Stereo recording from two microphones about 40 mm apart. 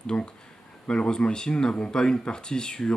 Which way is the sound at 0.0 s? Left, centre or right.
Left.